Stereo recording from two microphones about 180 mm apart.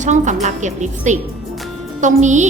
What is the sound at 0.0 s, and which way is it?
A woman's voice, 45° right (ahead or behind).